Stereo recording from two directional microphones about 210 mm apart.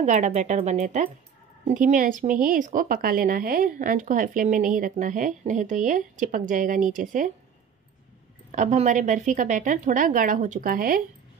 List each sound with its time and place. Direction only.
0.0 s speech: 35° right (ahead or behind)
8.5 s speech: 35° right (ahead or behind)